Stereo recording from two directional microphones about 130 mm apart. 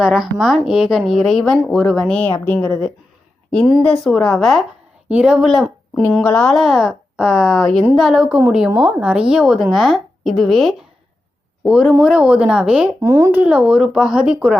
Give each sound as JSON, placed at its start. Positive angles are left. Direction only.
{"t": 0.0, "sound": "a woman's voice", "side_deg": -5}
{"t": 4.0, "sound": "a woman's voice", "side_deg": 0}
{"t": 5.5, "sound": "a woman's voice", "side_deg": 5}
{"t": 13.0, "sound": "speech", "side_deg": -25}
{"t": 13.4, "sound": "a woman's voice", "side_deg": -10}